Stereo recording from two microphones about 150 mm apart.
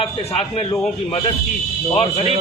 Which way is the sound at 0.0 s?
40° left (ahead or behind).